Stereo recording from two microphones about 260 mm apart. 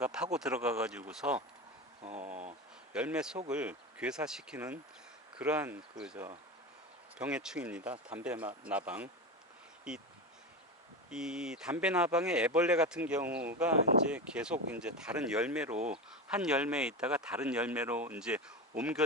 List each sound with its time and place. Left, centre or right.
0.0 s speech: centre
2.0 s speech: right
2.9 s speech: centre
11.1 s speech: centre